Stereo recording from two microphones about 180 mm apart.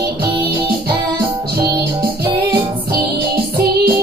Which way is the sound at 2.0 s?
60° right (ahead or behind).